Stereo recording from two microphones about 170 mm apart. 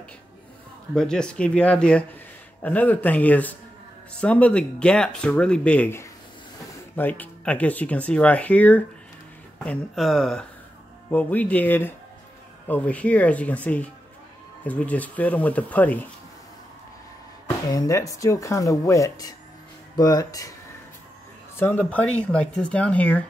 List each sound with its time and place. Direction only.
0.9 s speech: 5° left (ahead or behind)
17.6 s speech: 20° left (ahead or behind)
21.5 s speech: 10° left (ahead or behind)